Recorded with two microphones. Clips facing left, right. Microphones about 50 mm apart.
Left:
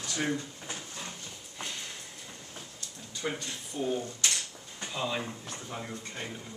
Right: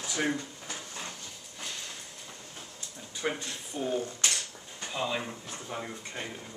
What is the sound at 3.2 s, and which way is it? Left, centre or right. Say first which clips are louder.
Speech: right 2 dB; right.